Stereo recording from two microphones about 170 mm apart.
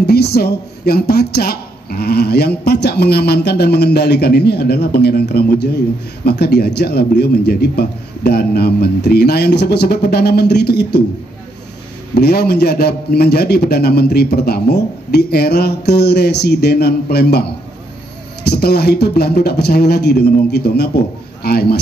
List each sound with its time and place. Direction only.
0.0 s speech: 70° left (ahead or behind)
12.2 s a man's voice: 70° left (ahead or behind)